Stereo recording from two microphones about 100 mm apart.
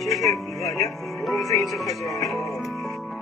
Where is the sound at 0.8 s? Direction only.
Centre (ahead or behind).